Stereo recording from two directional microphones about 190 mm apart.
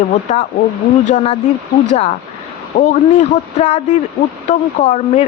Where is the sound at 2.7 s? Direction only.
35° left (ahead or behind).